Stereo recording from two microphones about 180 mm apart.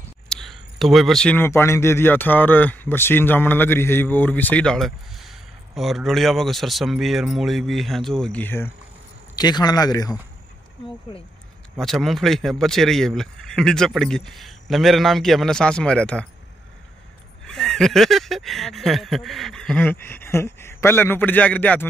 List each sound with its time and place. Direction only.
0.3 s speech: centre (ahead or behind)
9.3 s speech: 25° left (ahead or behind)
11.8 s speech: centre (ahead or behind)
17.5 s speech: centre (ahead or behind)